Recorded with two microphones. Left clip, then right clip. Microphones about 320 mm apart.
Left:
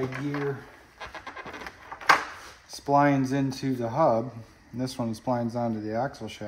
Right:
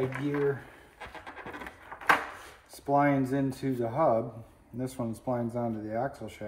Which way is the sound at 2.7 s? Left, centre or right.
Left.